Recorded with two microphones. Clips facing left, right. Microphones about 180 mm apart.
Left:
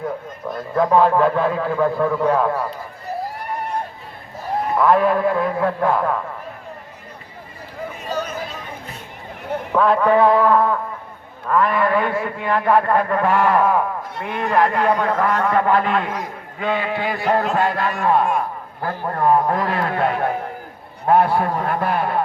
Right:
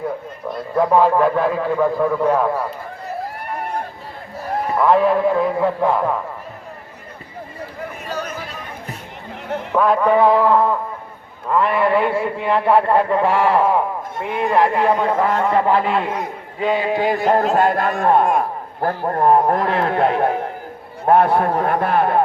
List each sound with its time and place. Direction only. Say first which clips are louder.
0.0 s a man's voice: right 1 dB; 10° right (ahead or behind)
5.1 s a man's voice: right 2 dB; 15° right (ahead or behind)
8.1 s a sound: left 2 dB; 10° right (ahead or behind)
9.7 s a man's voice: even; 10° right (ahead or behind)
12.4 s a man's voice: right 1 dB; 25° right (ahead or behind)
16.6 s a man's voice: right 3 dB; 10° right (ahead or behind)
16.8 s a man's voice: right 4 dB; 40° right (ahead or behind)
19.0 s a man's voice: right 2 dB; 35° right (ahead or behind)
19.6 s a man's voice: right 3 dB; 25° right (ahead or behind)
21.2 s a man's voice: right 3 dB; 50° right (ahead or behind)